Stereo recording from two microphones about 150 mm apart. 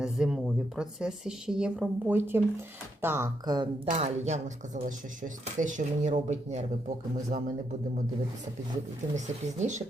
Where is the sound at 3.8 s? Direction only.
50° right (ahead or behind).